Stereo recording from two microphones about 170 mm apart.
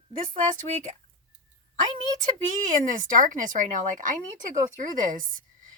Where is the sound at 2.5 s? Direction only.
50° right (ahead or behind).